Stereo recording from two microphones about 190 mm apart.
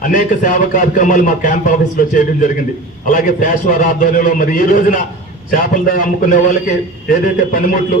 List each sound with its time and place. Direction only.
0.0 s a man's voice: 45° left (ahead or behind)